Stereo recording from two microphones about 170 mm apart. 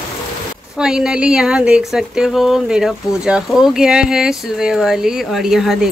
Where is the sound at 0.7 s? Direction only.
5° right (ahead or behind).